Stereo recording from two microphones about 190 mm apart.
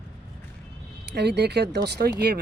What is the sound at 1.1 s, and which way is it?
Speech, 60° right (ahead or behind).